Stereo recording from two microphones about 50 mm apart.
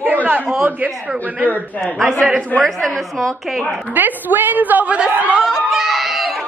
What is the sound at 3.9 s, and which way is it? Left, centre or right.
A woman's voice, right.